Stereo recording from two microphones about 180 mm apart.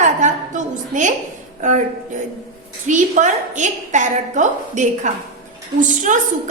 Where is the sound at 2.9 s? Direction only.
45° right (ahead or behind).